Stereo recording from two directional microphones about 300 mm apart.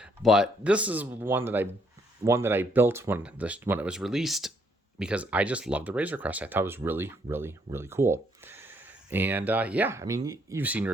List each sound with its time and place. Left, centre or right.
0.0 s speech: centre